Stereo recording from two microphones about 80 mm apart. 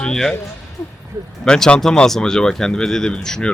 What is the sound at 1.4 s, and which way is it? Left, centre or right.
Speech, centre.